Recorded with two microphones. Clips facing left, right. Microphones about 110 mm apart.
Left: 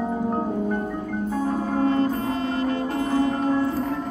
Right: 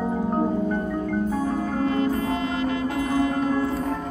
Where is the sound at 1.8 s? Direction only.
30° left (ahead or behind).